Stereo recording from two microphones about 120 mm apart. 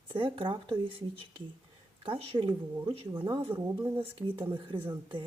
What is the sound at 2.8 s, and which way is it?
Speech, 45° right (ahead or behind).